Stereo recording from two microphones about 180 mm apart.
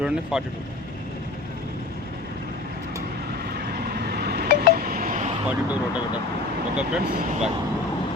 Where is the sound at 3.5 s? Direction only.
60° right (ahead or behind).